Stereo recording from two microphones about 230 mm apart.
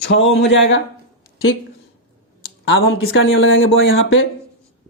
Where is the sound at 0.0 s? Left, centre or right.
Left.